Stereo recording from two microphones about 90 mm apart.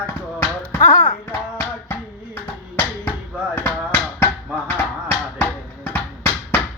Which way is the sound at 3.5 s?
25° left (ahead or behind).